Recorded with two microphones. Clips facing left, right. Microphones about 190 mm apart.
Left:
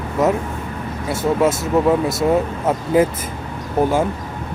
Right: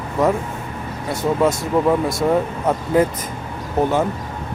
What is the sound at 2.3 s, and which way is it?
Speech, 10° left (ahead or behind).